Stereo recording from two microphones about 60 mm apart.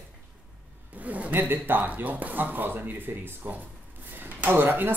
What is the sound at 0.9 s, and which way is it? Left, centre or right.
Speech, right.